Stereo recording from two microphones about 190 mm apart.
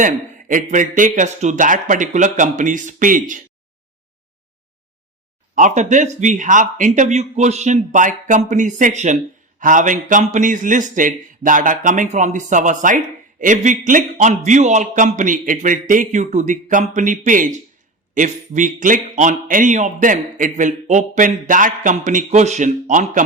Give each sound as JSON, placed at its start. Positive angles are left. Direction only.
{"t": 0.0, "sound": "a man's voice", "side_deg": -45}
{"t": 5.5, "sound": "a man's voice", "side_deg": -40}